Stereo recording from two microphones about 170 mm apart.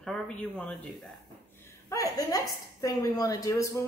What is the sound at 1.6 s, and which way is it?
A woman's voice, 20° left (ahead or behind).